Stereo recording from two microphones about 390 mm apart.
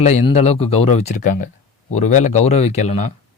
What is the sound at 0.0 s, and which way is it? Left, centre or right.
Speech, centre.